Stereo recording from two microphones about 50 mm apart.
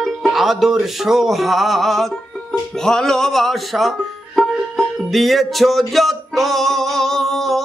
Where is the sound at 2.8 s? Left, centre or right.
Centre.